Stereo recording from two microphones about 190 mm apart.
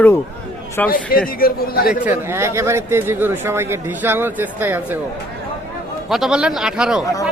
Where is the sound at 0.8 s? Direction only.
5° left (ahead or behind).